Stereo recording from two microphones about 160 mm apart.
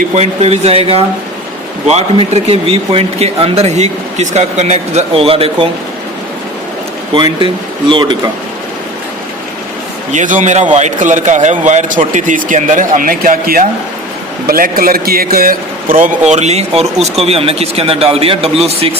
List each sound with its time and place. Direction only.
0.1 s a man's voice: 40° right (ahead or behind)
7.1 s a man's voice: 30° right (ahead or behind)
10.1 s a man's voice: 50° right (ahead or behind)